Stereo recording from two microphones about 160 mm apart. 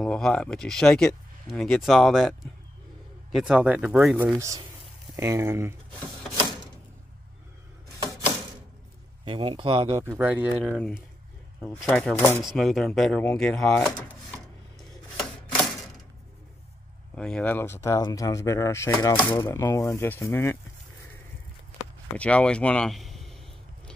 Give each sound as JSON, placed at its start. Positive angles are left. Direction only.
{"t": 0.0, "sound": "speech", "side_deg": 5}
{"t": 4.4, "sound": "speech", "side_deg": -20}
{"t": 9.2, "sound": "speech", "side_deg": -35}
{"t": 9.9, "sound": "speech", "side_deg": -15}
{"t": 10.6, "sound": "speech", "side_deg": 5}
{"t": 12.4, "sound": "speech", "side_deg": 0}
{"t": 17.1, "sound": "speech", "side_deg": 5}
{"t": 22.1, "sound": "speech", "side_deg": 5}